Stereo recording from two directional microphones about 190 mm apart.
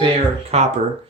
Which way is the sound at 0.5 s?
35° right (ahead or behind).